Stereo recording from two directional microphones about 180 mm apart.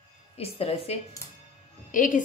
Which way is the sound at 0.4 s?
35° left (ahead or behind).